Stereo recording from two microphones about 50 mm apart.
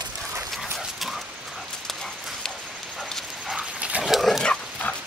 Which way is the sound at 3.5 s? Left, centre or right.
Right.